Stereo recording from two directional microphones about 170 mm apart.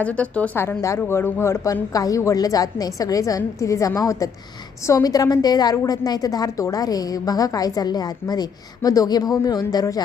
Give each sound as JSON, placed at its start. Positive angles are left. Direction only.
{"t": 0.0, "sound": "a woman's voice", "side_deg": 10}